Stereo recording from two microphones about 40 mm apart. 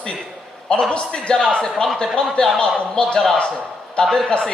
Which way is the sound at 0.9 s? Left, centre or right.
Left.